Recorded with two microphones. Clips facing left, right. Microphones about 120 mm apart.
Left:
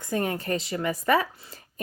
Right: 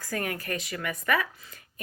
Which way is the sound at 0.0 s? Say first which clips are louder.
Left 5 dB; 25° left (ahead or behind).